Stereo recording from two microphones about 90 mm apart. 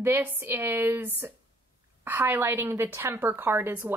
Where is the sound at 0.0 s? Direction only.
25° right (ahead or behind).